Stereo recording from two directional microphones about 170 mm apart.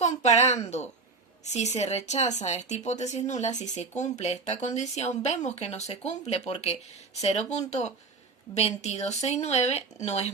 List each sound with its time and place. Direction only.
0.0 s a child's voice: 45° left (ahead or behind)